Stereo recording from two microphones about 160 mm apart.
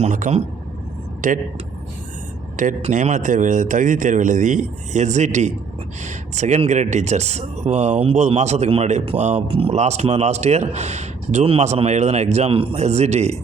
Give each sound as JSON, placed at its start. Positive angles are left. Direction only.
{"t": 0.0, "sound": "speech", "side_deg": -50}
{"t": 2.6, "sound": "speech", "side_deg": -55}